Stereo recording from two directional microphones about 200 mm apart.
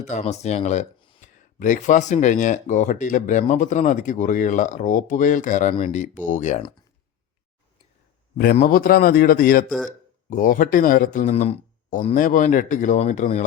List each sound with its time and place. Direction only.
0.0 s speech: 35° left (ahead or behind)
8.5 s speech: 45° left (ahead or behind)